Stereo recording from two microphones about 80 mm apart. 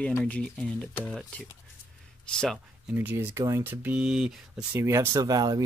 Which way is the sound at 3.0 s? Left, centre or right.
Right.